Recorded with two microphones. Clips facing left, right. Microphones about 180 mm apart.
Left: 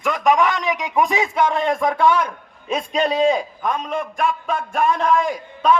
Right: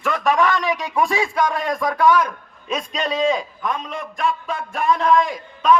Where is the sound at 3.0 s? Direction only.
40° left (ahead or behind).